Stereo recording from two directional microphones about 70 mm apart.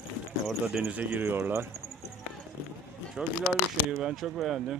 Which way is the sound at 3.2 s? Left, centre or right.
Centre.